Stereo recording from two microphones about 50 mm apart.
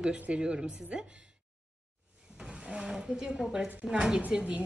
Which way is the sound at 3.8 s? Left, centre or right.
Centre.